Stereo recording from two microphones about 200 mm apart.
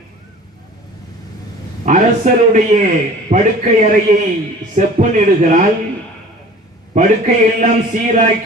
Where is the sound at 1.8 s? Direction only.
40° right (ahead or behind).